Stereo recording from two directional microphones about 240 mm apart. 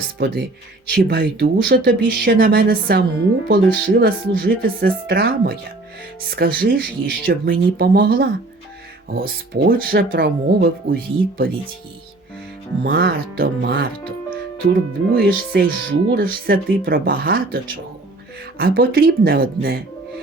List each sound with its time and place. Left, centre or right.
0.2 s speech: right
12.8 s speech: right